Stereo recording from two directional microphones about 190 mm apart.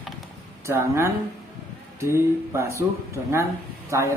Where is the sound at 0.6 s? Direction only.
15° right (ahead or behind).